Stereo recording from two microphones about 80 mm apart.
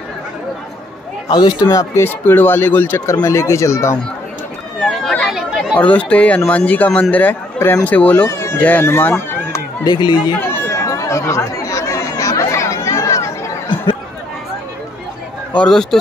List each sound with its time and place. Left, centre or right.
1.3 s speech: left
1.7 s speech: left
3.3 s speech: left
4.7 s chatter: centre
5.8 s speech: centre
8.3 s a sound: left
8.5 s speech: left
8.8 s speech: left
9.8 s speech: left
10.4 s chatter: left
15.5 s speech: centre